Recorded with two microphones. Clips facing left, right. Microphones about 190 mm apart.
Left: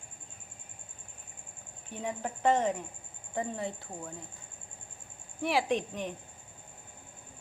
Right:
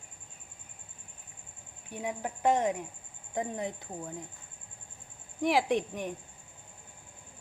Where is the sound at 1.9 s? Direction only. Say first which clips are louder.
Even; 10° right (ahead or behind).